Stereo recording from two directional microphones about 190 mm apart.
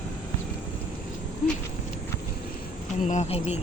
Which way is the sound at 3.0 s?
40° left (ahead or behind).